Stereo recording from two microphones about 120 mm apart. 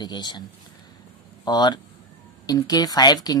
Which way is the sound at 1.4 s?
35° left (ahead or behind).